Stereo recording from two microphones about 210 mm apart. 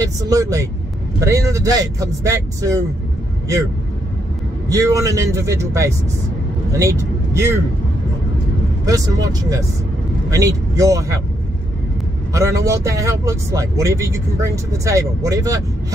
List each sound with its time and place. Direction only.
0.3 s speech: 15° right (ahead or behind)
4.6 s speech: 15° right (ahead or behind)
8.8 s speech: 15° right (ahead or behind)
12.4 s speech: 15° right (ahead or behind)